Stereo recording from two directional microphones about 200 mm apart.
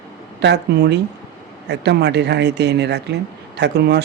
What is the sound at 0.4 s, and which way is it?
A man's voice, 60° right (ahead or behind).